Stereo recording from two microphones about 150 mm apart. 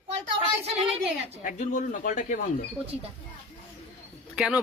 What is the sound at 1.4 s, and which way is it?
Speech, 55° left (ahead or behind).